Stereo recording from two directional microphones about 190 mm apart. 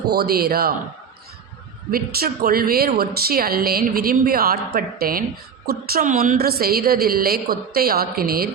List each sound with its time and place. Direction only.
0.1 s speech: 55° right (ahead or behind)
1.9 s speech: 50° right (ahead or behind)